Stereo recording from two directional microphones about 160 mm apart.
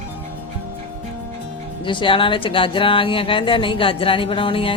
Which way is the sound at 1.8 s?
30° left (ahead or behind).